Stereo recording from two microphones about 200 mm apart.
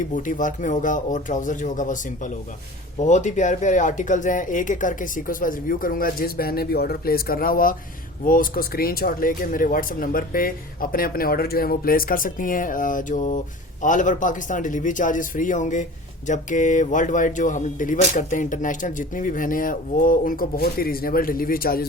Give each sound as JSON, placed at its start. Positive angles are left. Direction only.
{"t": 0.1, "sound": "a man's voice", "side_deg": 40}